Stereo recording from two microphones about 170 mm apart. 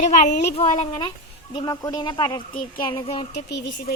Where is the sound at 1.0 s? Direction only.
30° left (ahead or behind).